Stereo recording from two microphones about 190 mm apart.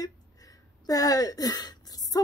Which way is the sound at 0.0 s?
20° left (ahead or behind).